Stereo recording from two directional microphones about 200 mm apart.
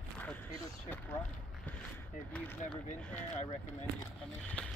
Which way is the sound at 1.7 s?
10° left (ahead or behind).